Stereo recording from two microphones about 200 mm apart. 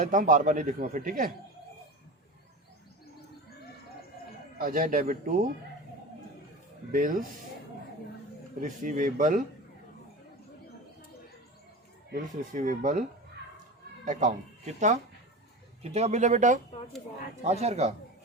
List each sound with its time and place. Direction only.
0.0 s speech: 40° right (ahead or behind)
4.5 s speech: 45° right (ahead or behind)
6.9 s speech: 40° right (ahead or behind)
8.6 s speech: 40° right (ahead or behind)
12.1 s speech: 40° right (ahead or behind)
15.8 s speech: 30° right (ahead or behind)